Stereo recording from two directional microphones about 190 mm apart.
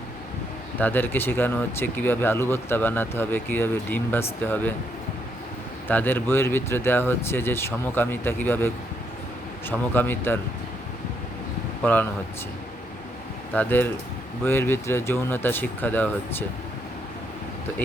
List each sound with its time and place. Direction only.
0.8 s speech: 10° left (ahead or behind)
5.9 s speech: 10° left (ahead or behind)
13.5 s speech: 10° left (ahead or behind)